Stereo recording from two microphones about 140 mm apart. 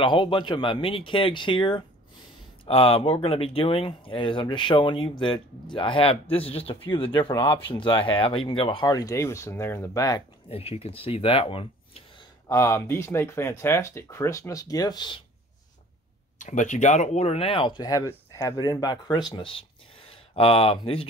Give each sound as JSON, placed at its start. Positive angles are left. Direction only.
{"t": 0.0, "sound": "speech", "side_deg": 35}
{"t": 10.5, "sound": "speech", "side_deg": 45}
{"t": 12.4, "sound": "speech", "side_deg": 20}
{"t": 16.3, "sound": "speech", "side_deg": 65}